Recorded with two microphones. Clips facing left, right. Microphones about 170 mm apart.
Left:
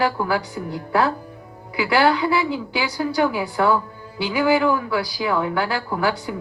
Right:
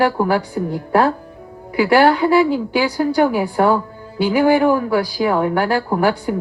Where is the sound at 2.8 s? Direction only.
40° right (ahead or behind).